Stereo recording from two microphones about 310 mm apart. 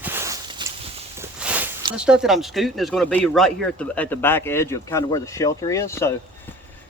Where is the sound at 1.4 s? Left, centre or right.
Centre.